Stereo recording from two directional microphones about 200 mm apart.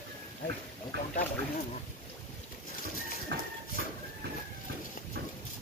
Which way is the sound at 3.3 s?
60° right (ahead or behind).